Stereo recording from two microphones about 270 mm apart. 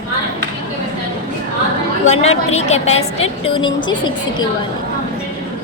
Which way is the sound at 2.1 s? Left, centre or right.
Left.